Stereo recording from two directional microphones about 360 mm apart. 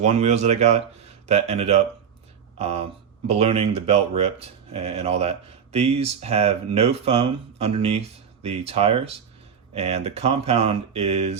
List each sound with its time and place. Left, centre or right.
0.0 s speech: centre